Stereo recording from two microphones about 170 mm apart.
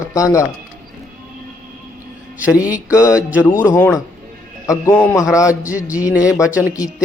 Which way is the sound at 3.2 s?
10° right (ahead or behind).